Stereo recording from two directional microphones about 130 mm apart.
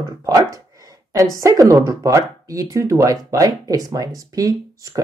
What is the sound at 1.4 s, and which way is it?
Speech, 25° right (ahead or behind).